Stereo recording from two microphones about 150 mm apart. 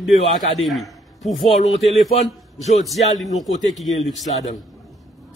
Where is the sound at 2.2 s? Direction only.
45° left (ahead or behind).